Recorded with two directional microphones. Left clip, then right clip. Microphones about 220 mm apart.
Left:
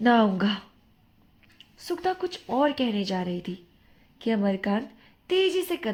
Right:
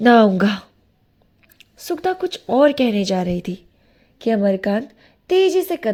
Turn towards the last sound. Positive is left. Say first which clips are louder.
# right 8 dB
turn(degrees=-25)  # may be behind; listen again after turning